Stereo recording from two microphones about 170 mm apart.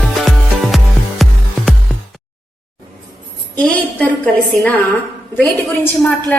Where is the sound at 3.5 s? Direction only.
10° left (ahead or behind).